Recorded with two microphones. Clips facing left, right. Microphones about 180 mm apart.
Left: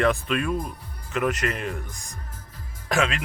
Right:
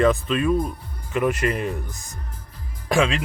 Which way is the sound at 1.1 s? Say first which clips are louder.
Right 4 dB; 10° right (ahead or behind).